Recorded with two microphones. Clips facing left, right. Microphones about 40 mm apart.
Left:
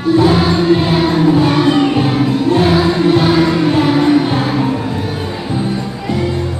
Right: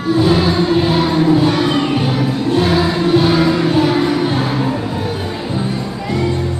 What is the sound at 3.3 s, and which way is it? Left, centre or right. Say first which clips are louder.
Music: left 2 dB; centre.